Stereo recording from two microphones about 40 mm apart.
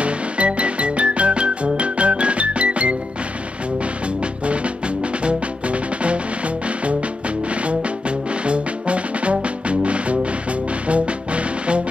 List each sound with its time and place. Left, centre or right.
0.0 s music: right
4.5 s music: right
8.5 s music: right